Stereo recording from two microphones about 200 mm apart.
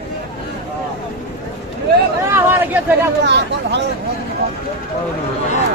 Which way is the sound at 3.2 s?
60° right (ahead or behind).